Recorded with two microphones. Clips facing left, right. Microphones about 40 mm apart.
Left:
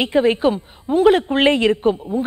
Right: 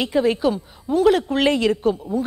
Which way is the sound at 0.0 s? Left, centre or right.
Left.